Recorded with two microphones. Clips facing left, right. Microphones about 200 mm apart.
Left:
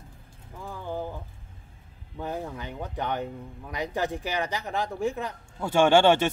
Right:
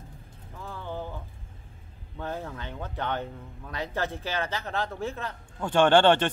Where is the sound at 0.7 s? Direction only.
10° left (ahead or behind).